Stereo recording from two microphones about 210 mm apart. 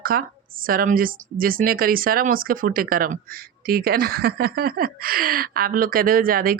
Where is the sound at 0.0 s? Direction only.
45° right (ahead or behind).